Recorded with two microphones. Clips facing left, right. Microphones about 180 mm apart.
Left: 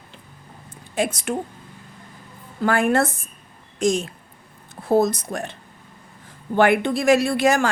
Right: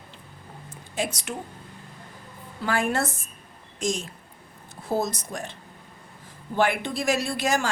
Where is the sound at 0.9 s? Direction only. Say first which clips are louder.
Left 7 dB; 55° left (ahead or behind).